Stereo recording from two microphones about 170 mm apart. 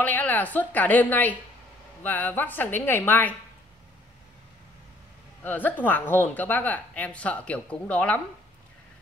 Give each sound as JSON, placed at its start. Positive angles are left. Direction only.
{"t": 0.0, "sound": "speech", "side_deg": 10}
{"t": 5.4, "sound": "speech", "side_deg": 10}